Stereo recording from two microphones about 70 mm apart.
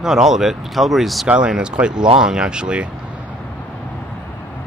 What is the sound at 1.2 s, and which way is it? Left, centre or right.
Speech, centre.